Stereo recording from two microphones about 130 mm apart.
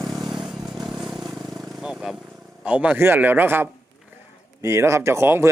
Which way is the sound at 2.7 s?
10° right (ahead or behind).